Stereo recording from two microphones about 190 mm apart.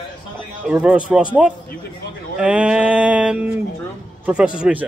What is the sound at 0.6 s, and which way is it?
A man's voice, 5° right (ahead or behind).